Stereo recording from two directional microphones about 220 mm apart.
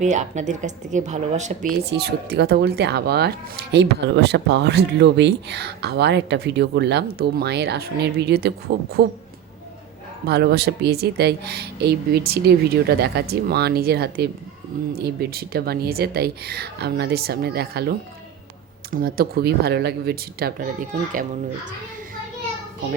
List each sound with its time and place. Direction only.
0.0 s speech: 35° right (ahead or behind)
1.8 s speech: 50° right (ahead or behind)
10.2 s speech: 45° right (ahead or behind)